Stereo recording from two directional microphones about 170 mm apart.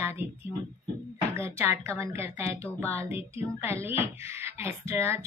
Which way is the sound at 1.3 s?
15° right (ahead or behind).